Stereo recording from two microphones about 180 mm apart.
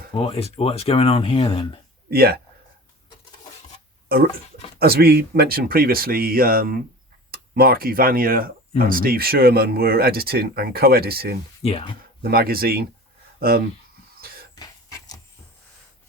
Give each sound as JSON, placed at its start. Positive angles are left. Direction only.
{"t": 0.2, "sound": "speech", "side_deg": 35}
{"t": 2.0, "sound": "speech", "side_deg": -60}
{"t": 4.8, "sound": "speech", "side_deg": -60}
{"t": 11.6, "sound": "speech", "side_deg": 35}
{"t": 12.2, "sound": "speech", "side_deg": -55}
{"t": 14.5, "sound": "a sound", "side_deg": 20}